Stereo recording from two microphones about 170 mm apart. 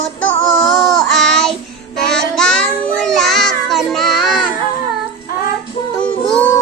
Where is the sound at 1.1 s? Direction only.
5° left (ahead or behind).